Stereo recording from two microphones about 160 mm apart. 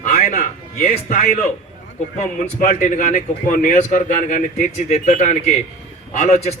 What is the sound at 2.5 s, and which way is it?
A man's voice, 55° left (ahead or behind).